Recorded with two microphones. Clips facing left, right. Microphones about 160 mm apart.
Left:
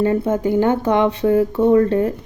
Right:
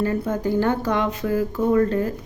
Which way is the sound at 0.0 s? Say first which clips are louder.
Left 5 dB; 25° left (ahead or behind).